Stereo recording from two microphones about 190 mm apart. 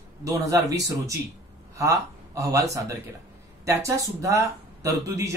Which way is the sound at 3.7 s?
15° right (ahead or behind).